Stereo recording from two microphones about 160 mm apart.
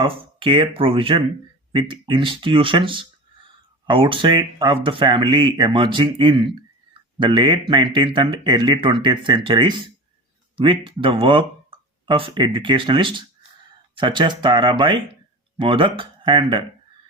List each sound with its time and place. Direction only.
0.0 s speech: 35° right (ahead or behind)